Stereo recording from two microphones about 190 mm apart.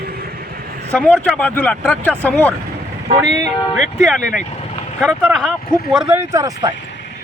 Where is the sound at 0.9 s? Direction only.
5° left (ahead or behind).